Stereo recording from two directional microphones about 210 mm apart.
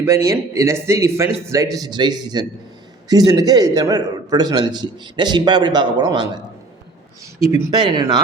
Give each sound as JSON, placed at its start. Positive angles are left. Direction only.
{"t": 0.0, "sound": "a man's voice", "side_deg": -15}
{"t": 7.7, "sound": "a man's voice", "side_deg": -20}